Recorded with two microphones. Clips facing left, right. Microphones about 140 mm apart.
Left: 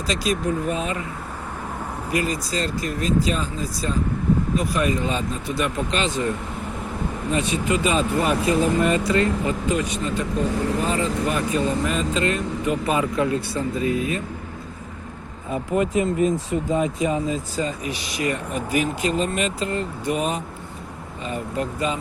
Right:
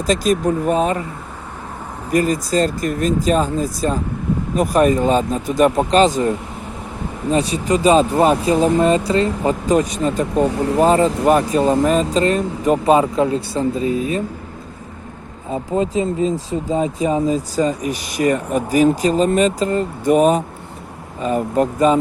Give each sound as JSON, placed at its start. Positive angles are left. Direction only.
{"t": 0.0, "sound": "speech", "side_deg": -45}
{"t": 2.1, "sound": "speech", "side_deg": -45}
{"t": 10.3, "sound": "speech", "side_deg": -75}
{"t": 10.8, "sound": "speech", "side_deg": -35}
{"t": 15.4, "sound": "speech", "side_deg": -25}